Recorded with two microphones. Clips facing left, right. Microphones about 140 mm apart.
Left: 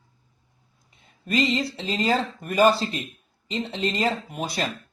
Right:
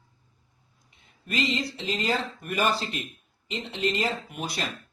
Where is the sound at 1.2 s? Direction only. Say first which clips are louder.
Left 5 dB; 35° left (ahead or behind).